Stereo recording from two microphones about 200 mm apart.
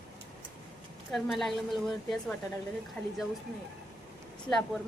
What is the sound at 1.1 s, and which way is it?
A woman's voice, centre (ahead or behind).